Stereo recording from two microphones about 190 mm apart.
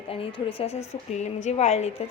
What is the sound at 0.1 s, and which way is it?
A woman's voice, 30° left (ahead or behind).